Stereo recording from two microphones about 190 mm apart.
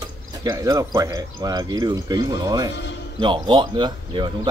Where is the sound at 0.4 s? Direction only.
20° right (ahead or behind).